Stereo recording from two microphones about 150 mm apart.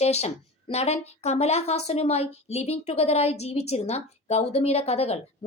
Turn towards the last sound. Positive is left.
turn(degrees=45)  # may be behind; listen again after turning